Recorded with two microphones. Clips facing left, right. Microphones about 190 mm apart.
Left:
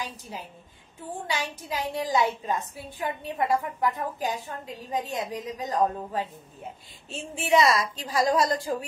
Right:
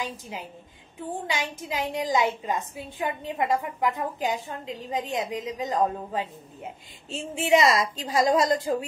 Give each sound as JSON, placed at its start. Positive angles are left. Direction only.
{"t": 0.0, "sound": "a woman's voice", "side_deg": -15}